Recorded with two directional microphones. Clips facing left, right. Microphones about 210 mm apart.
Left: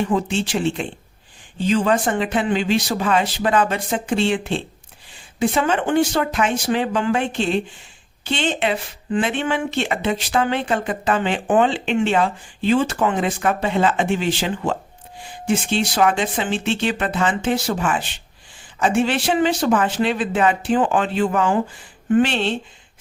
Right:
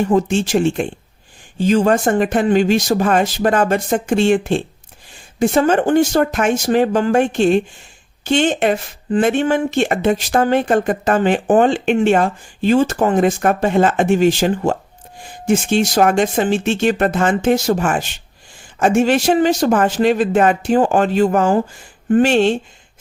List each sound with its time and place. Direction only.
0.0 s speech: 45° right (ahead or behind)